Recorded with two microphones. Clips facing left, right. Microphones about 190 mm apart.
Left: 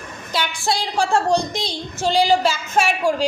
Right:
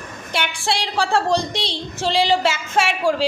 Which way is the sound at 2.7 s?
90° right.